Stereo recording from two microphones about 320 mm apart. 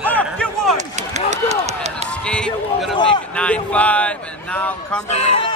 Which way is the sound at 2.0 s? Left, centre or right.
Centre.